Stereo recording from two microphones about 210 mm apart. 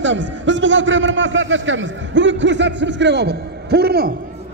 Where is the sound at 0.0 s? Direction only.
60° right (ahead or behind).